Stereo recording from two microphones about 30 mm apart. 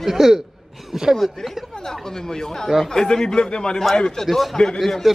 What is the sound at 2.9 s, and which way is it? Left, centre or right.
A man's voice, left.